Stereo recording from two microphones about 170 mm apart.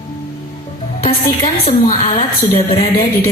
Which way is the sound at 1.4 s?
40° left (ahead or behind).